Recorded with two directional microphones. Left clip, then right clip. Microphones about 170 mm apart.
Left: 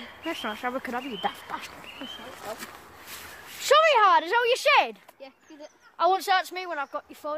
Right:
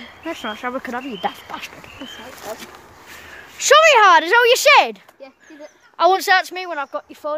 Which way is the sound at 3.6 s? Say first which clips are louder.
Right 8 dB; 45° right (ahead or behind).